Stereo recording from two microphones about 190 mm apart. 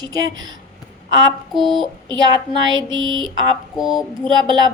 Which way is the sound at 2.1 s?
25° right (ahead or behind).